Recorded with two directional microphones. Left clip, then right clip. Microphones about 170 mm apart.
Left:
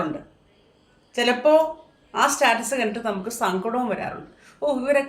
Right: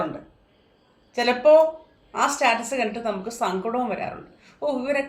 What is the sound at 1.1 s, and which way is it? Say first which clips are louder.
A woman's voice: right 2 dB; 20° left (ahead or behind).